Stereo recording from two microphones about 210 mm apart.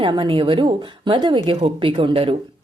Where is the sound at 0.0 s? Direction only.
25° right (ahead or behind).